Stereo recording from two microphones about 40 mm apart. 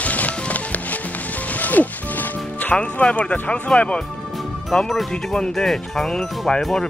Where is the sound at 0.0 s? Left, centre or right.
Left.